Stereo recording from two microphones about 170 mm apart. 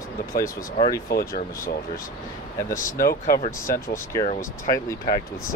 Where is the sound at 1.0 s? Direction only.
65° left (ahead or behind).